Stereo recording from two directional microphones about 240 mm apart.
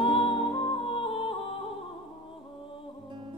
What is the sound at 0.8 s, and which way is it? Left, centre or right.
Music, left.